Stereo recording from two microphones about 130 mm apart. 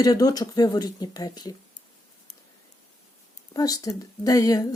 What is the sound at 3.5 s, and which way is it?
Speech, 30° left (ahead or behind).